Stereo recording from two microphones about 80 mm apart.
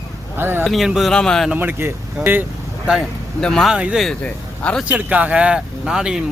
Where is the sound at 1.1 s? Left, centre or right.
Centre.